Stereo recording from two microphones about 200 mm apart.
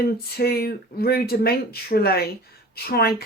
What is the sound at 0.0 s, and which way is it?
Speech, 50° left (ahead or behind).